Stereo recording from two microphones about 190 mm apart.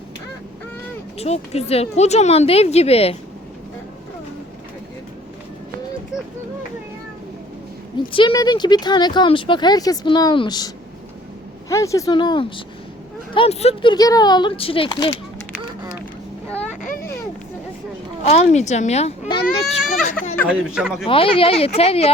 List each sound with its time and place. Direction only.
1.2 s speech: 35° left (ahead or behind)
7.9 s speech: 25° left (ahead or behind)
11.7 s speech: 15° left (ahead or behind); by 13.9 s 35° left (ahead or behind)
13.9 s speech: 20° left (ahead or behind)
18.2 s speech: 35° left (ahead or behind)
20.5 s speech: 5° right (ahead or behind)
21.1 s speech: 30° left (ahead or behind)